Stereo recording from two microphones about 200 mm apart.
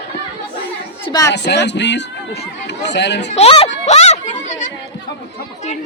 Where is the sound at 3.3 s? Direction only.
30° left (ahead or behind).